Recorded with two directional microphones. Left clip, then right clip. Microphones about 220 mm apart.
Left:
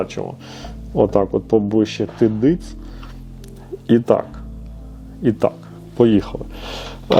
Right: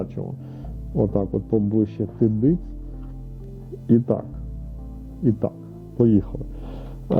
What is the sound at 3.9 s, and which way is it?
Speech, 10° left (ahead or behind).